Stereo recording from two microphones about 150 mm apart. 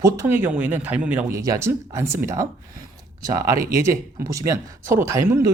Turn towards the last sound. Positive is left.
turn(degrees=-20)  # may be behind; listen again after turning